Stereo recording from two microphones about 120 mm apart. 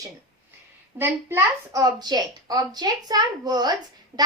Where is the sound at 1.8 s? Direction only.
35° right (ahead or behind).